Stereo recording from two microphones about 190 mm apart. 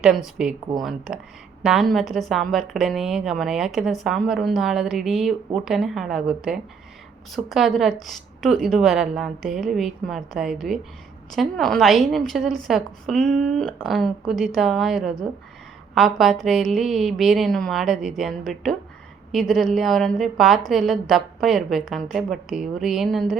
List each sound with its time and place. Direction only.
0.4 s a woman's voice: 5° right (ahead or behind)